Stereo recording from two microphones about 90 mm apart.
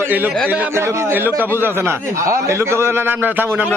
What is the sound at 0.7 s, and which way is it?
Speech, 30° right (ahead or behind).